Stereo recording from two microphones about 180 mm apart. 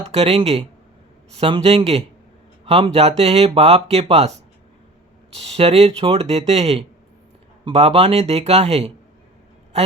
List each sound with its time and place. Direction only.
0.1 s speech: 30° right (ahead or behind)
5.3 s speech: 35° right (ahead or behind)